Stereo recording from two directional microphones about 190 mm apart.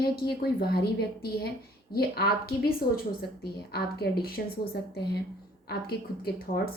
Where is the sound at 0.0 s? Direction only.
55° left (ahead or behind).